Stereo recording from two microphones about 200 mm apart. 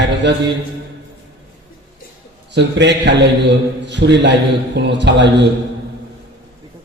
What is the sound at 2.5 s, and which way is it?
A man's voice, 60° right (ahead or behind).